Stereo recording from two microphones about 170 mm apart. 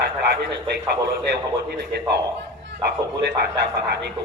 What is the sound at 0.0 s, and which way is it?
A man's voice, 70° right (ahead or behind).